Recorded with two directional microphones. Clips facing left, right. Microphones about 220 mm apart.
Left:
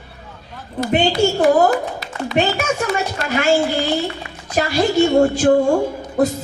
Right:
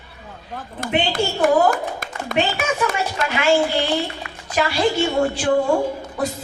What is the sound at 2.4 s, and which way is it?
A woman's voice, 45° left (ahead or behind).